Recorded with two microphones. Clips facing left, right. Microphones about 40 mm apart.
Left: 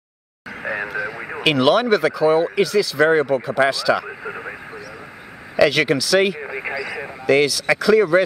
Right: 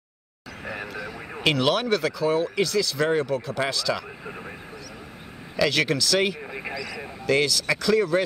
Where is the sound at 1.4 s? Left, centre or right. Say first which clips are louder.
Left 6 dB; centre.